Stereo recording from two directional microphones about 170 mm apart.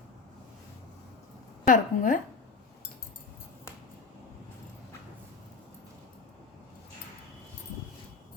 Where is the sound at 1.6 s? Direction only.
50° left (ahead or behind).